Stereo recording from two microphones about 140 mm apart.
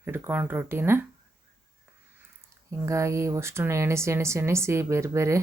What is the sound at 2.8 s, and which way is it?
Speech, 20° right (ahead or behind).